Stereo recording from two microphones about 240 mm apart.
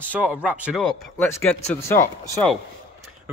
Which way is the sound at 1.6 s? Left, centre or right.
Left.